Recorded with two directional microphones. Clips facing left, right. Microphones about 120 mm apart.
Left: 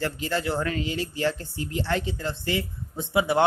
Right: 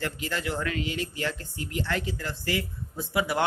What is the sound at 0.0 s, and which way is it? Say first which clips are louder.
Speech: left 4 dB; 30° left (ahead or behind).